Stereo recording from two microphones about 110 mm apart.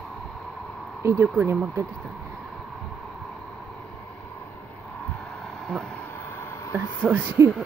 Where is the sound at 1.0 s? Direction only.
20° right (ahead or behind).